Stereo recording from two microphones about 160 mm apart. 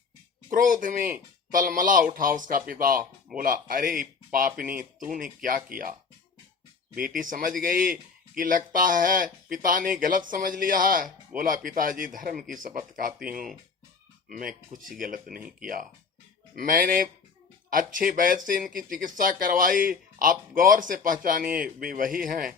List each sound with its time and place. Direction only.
0.5 s speech: 55° right (ahead or behind)
15.4 s speech: 10° right (ahead or behind)
16.6 s speech: 55° right (ahead or behind)